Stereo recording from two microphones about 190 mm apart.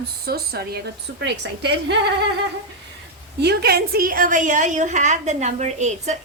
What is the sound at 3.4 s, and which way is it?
A woman's voice, 60° right (ahead or behind).